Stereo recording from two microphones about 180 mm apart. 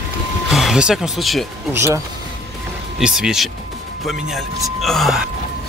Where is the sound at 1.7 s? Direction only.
15° right (ahead or behind).